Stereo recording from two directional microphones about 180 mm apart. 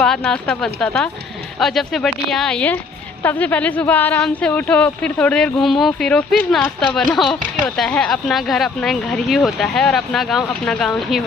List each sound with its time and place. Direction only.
0.0 s speech: 5° left (ahead or behind)